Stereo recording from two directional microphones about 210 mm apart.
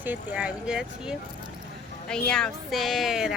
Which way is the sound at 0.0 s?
10° right (ahead or behind).